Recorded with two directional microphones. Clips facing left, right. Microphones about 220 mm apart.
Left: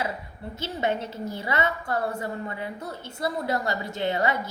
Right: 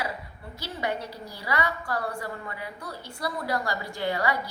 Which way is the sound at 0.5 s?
25° left (ahead or behind).